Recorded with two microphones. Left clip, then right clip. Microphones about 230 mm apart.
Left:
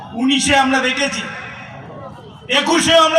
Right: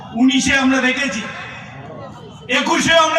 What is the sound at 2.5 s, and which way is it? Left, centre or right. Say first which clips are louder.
Speech: left 1 dB; left.